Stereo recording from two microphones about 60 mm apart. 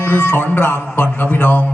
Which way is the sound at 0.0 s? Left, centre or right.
Left.